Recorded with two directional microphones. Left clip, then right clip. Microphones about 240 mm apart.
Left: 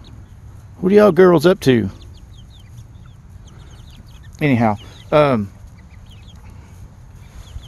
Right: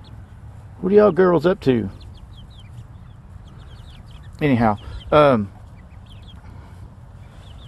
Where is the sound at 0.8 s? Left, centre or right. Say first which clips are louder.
Left 3 dB; left.